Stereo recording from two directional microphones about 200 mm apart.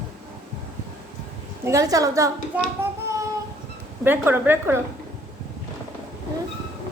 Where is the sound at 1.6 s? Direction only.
15° right (ahead or behind).